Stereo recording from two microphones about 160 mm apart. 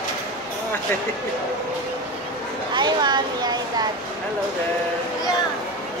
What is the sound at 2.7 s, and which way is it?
Speech, 25° right (ahead or behind).